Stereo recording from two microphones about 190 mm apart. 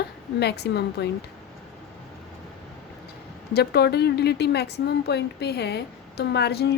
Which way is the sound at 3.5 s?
55° left (ahead or behind).